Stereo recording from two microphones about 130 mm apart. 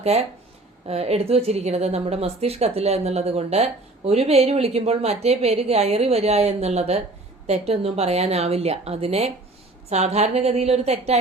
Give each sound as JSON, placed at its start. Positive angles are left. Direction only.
{"t": 0.0, "sound": "a woman's voice", "side_deg": -55}